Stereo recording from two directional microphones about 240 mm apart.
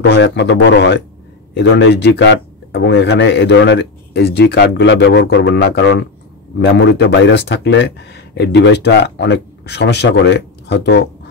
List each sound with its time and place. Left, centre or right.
0.0 s speech: left